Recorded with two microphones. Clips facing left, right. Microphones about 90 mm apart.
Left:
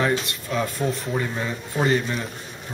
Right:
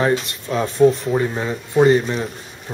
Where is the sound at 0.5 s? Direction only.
35° right (ahead or behind).